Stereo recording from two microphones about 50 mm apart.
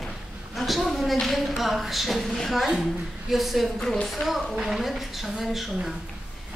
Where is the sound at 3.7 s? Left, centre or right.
Centre.